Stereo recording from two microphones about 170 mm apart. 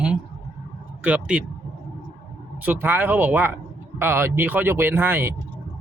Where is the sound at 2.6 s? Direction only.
10° right (ahead or behind).